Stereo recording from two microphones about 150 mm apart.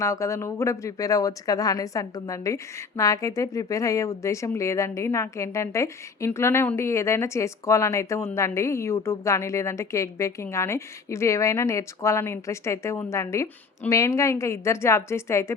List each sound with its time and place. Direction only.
0.0 s speech: 20° left (ahead or behind)